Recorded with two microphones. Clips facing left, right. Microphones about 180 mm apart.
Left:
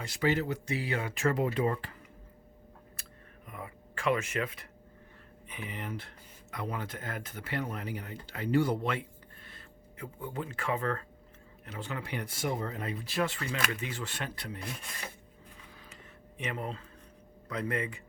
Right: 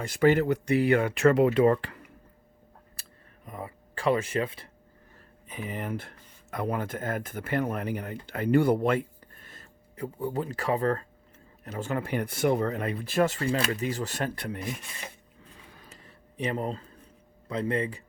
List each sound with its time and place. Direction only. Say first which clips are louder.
0.0 s speech: right 8 dB; 50° right (ahead or behind); by 2.0 s 75° right (ahead or behind)
2.9 s a sound: left 2 dB; 35° right (ahead or behind)
5.5 s speech: right 6 dB; 40° right (ahead or behind)
16.4 s speech: right 7 dB; 35° right (ahead or behind)